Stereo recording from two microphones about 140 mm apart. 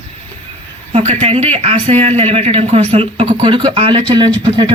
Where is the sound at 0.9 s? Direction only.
45° right (ahead or behind).